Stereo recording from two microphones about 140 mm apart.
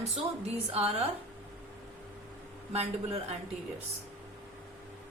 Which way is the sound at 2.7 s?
45° right (ahead or behind).